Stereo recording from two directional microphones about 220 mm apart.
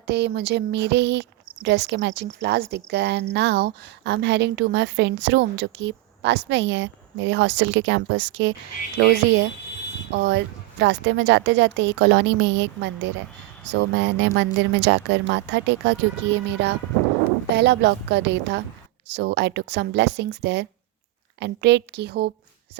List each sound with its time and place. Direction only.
0.1 s a woman's voice: 50° right (ahead or behind)
10.2 s a woman's voice: 55° right (ahead or behind)